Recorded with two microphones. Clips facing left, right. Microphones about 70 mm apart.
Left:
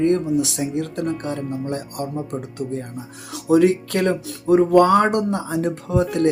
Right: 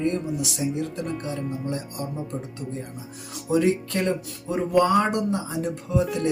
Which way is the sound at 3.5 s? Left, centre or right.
Left.